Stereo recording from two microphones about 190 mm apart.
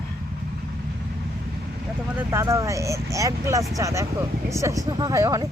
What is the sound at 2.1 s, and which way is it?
Speech, 10° right (ahead or behind).